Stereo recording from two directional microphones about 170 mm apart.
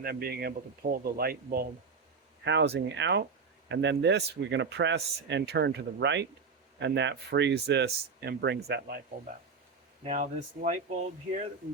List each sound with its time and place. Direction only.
0.0 s speech: 65° right (ahead or behind)
2.4 s speech: 90° right
10.0 s speech: 45° right (ahead or behind)